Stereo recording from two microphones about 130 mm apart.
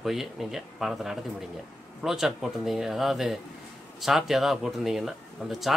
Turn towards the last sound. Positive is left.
turn(degrees=-5)  # may be behind; listen again after turning